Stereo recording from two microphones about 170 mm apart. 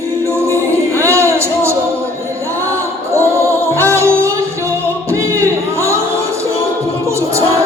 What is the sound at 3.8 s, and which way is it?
Music, 15° right (ahead or behind).